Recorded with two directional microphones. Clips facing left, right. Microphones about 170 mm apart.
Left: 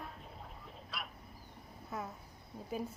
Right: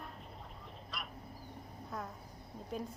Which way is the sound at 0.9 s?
Centre (ahead or behind).